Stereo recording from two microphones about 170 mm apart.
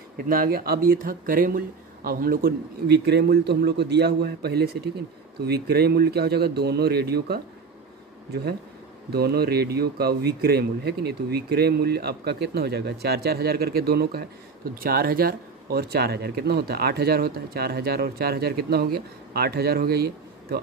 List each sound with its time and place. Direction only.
0.2 s speech: 55° right (ahead or behind)
9.1 s speech: 70° right (ahead or behind)